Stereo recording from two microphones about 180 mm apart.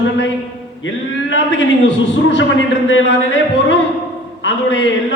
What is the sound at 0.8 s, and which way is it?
A man's voice, 90° left.